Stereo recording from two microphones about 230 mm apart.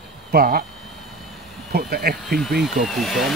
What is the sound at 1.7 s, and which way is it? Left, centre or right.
Speech, right.